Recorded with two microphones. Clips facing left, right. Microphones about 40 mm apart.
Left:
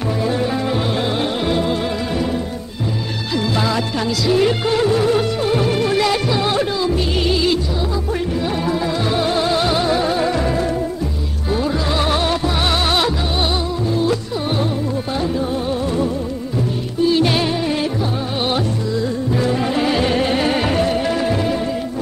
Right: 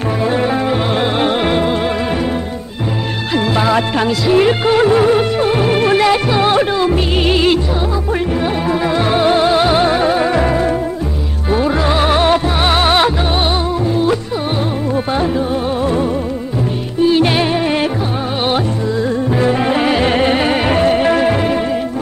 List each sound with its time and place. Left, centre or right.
0.2 s music: right
3.5 s music: right
8.6 s music: right
17.0 s music: right
19.4 s music: right